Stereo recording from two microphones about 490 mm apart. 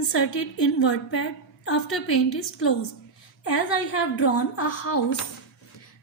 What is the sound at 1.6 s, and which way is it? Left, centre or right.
A woman's voice, left.